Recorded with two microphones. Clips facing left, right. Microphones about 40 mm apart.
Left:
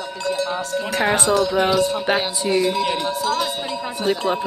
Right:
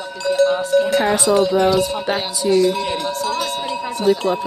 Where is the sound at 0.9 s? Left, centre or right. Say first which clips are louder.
Right 3 dB; left.